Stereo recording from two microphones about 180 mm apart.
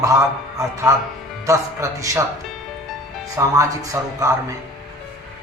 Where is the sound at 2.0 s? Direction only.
20° right (ahead or behind).